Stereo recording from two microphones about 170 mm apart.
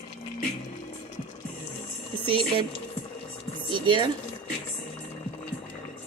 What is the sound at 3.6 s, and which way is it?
Speech, 30° right (ahead or behind).